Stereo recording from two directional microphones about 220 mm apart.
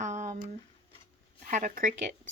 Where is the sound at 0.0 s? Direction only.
35° right (ahead or behind).